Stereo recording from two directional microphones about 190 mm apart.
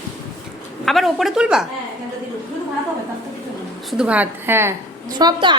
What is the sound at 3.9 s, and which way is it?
Speech, 5° right (ahead or behind).